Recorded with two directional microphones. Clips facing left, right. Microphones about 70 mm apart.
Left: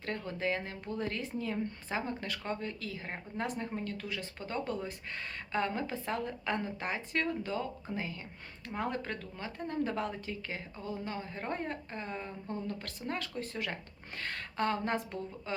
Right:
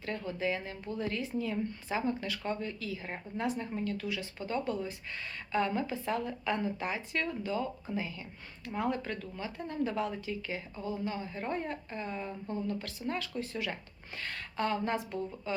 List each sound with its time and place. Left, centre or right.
0.0 s speech: left
3.3 s speech: left
5.5 s speech: left
12.6 s speech: left